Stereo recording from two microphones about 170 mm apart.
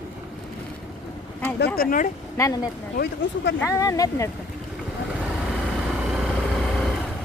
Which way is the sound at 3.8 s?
20° left (ahead or behind).